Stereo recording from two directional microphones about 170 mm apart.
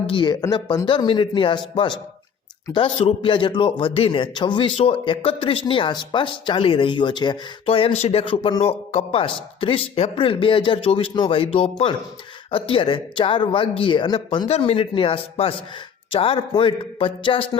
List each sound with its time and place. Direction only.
0.1 s speech: 25° left (ahead or behind)